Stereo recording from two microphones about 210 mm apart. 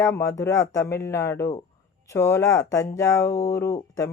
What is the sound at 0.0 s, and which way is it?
Speech, 15° left (ahead or behind).